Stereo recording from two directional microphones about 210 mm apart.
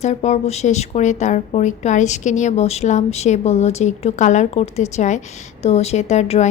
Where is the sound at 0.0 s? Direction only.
35° left (ahead or behind).